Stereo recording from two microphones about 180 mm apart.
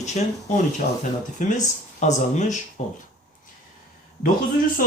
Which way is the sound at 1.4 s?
45° left (ahead or behind).